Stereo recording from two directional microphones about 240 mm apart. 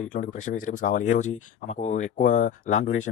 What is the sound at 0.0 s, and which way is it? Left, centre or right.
Speech, left.